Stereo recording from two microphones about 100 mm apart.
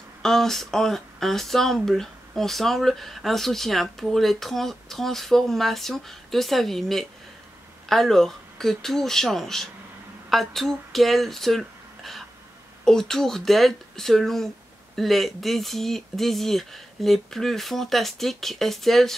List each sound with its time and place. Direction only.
0.2 s speech: 5° left (ahead or behind)